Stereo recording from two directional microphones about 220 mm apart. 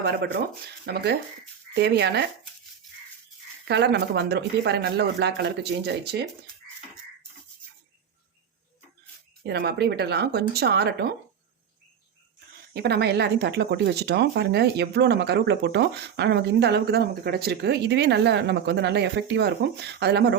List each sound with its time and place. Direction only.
0.0 s speech: 45° right (ahead or behind)
3.7 s speech: 50° right (ahead or behind)
9.5 s speech: 50° right (ahead or behind)
12.7 s speech: 50° right (ahead or behind)